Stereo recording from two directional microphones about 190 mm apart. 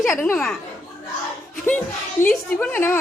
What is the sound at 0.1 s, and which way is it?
Speech, 10° left (ahead or behind).